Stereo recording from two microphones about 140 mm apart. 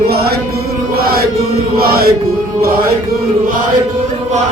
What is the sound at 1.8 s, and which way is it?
Chant, 90° right.